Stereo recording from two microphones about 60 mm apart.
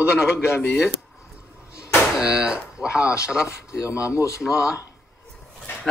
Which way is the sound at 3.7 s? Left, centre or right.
Left.